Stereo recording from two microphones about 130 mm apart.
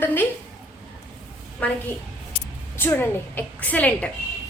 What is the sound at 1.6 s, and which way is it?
A woman's voice, 10° left (ahead or behind).